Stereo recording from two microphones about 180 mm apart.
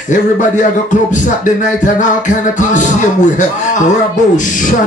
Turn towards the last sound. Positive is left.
turn(degrees=45)  # may be behind; listen again after turning